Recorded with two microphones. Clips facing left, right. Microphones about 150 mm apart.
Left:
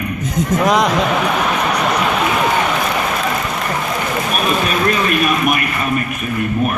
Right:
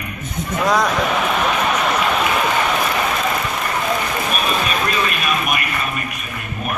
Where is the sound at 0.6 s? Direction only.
20° left (ahead or behind).